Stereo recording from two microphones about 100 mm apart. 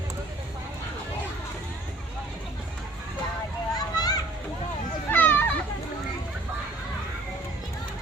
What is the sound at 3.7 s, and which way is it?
Children playing, 40° left (ahead or behind).